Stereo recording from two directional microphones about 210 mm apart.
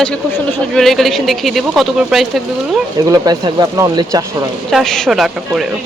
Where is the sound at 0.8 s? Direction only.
Centre (ahead or behind).